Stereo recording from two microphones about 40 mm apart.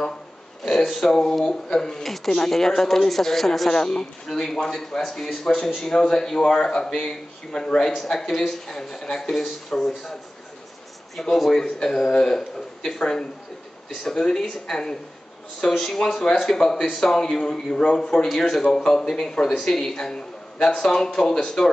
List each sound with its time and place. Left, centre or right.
0.7 s speech: centre
11.1 s a man's voice: centre
13.0 s a man's voice: left